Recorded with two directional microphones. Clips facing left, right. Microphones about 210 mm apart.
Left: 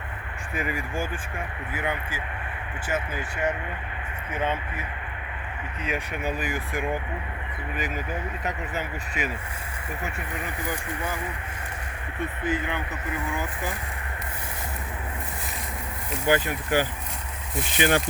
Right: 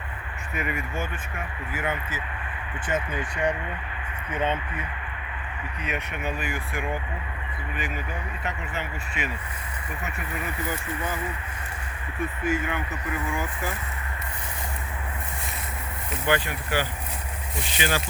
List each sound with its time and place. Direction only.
0.5 s speech: 30° left (ahead or behind)
1.7 s speech: 15° left (ahead or behind)
5.8 s speech: 35° left (ahead or behind)
8.4 s speech: 40° left (ahead or behind)
10.7 s speech: 10° left (ahead or behind)
12.4 s speech: 20° left (ahead or behind)
16.3 s speech: 45° left (ahead or behind)